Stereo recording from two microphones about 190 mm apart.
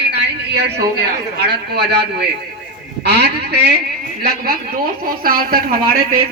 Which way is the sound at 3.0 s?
60° right (ahead or behind).